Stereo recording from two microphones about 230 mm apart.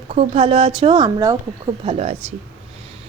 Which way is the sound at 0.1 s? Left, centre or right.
Right.